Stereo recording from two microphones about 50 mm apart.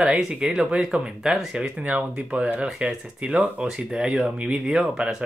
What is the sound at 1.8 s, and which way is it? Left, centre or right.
Speech, right.